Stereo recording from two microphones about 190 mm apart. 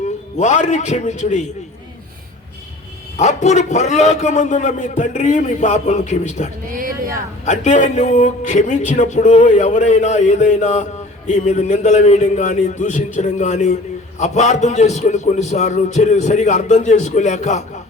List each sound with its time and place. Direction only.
0.3 s speech: 35° left (ahead or behind)
3.2 s speech: 35° left (ahead or behind)
6.7 s a sound: 50° right (ahead or behind)
7.4 s speech: 40° left (ahead or behind)